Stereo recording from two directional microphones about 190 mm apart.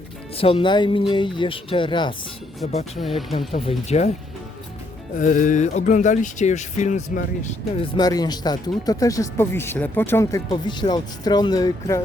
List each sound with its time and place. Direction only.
0.3 s speech: 30° left (ahead or behind)
3.0 s speech: centre (ahead or behind)
3.5 s speech: 35° left (ahead or behind)
5.1 s speech: 40° left (ahead or behind)
7.9 s speech: 20° left (ahead or behind)
10.5 s speech: 25° left (ahead or behind)